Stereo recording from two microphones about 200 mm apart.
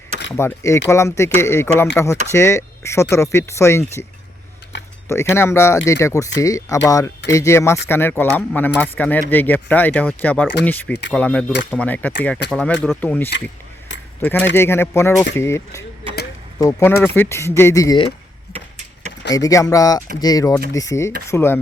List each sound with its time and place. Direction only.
0.3 s speech: 15° left (ahead or behind)
4.7 s a sound: 65° left (ahead or behind)
5.3 s speech: 10° left (ahead or behind)
19.3 s speech: 15° left (ahead or behind)